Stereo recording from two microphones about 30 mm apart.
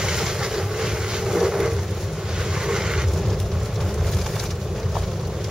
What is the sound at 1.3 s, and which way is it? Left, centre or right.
Boat, centre.